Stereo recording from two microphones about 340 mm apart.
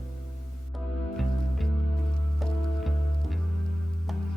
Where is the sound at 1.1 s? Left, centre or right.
Centre.